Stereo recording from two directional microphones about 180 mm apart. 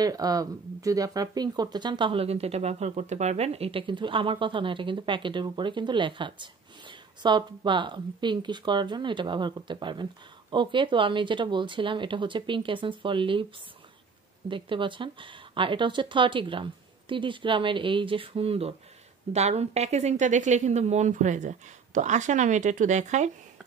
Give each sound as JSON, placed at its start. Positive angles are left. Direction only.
{"t": 0.0, "sound": "speech", "side_deg": -20}
{"t": 14.5, "sound": "a woman's voice", "side_deg": -30}